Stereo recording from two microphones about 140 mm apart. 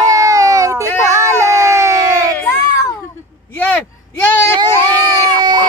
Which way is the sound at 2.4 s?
20° left (ahead or behind).